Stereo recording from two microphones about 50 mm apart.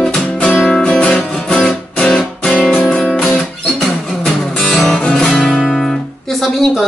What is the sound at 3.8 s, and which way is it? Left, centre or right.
Music, centre.